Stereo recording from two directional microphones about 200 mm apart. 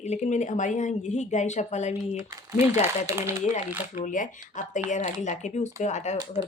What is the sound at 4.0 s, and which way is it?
A woman's voice, 40° left (ahead or behind).